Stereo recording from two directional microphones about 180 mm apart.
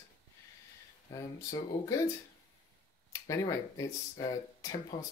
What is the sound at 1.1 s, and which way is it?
Speech, 20° left (ahead or behind).